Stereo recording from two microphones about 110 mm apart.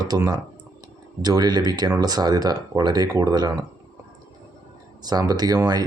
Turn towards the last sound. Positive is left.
turn(degrees=-35)  # may be behind; listen again after turning